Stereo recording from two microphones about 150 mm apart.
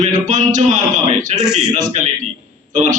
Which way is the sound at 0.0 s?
55° right (ahead or behind).